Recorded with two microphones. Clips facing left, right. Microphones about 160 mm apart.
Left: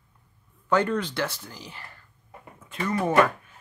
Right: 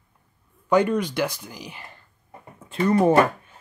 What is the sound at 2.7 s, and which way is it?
Speech, 30° right (ahead or behind).